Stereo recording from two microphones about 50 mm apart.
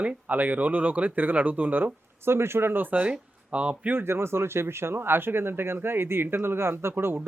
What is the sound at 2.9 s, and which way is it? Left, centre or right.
Speech, right.